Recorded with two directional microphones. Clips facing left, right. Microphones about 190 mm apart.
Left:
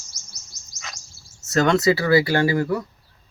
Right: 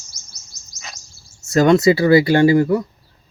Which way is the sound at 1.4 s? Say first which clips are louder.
Right 5 dB; 15° right (ahead or behind).